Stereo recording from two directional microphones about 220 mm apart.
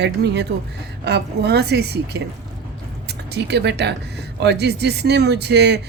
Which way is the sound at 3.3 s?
50° right (ahead or behind).